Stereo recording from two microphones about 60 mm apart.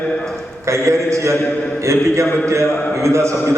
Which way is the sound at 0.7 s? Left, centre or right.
Right.